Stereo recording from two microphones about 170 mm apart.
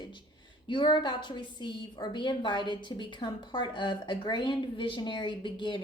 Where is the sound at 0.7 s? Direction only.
30° left (ahead or behind).